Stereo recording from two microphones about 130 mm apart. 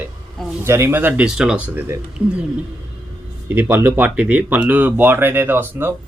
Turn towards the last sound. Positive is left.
turn(degrees=-15)  # may be behind; listen again after turning